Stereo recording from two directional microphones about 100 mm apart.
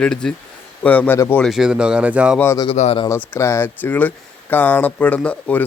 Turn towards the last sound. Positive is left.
turn(degrees=10)  # may be behind; listen again after turning